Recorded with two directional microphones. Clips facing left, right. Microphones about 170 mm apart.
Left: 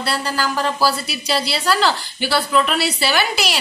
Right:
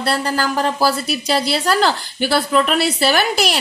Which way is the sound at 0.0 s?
50° right (ahead or behind).